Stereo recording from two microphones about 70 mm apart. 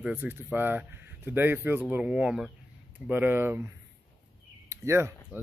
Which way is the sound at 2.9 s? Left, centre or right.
Right.